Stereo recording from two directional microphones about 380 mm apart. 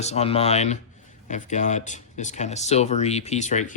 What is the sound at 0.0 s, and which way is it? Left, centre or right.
Speech, centre.